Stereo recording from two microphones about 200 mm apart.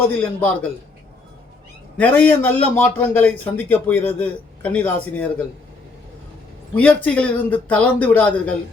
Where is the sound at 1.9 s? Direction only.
10° left (ahead or behind).